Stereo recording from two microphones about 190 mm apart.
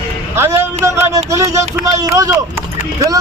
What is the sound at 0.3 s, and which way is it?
A man's voice, 15° right (ahead or behind).